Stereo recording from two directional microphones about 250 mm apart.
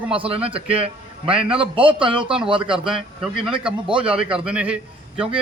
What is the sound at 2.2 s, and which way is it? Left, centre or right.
Speech, centre.